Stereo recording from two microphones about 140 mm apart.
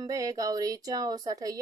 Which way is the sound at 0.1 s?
25° right (ahead or behind).